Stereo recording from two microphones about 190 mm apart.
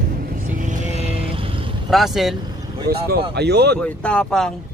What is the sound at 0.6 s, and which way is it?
Vehicle, 40° right (ahead or behind).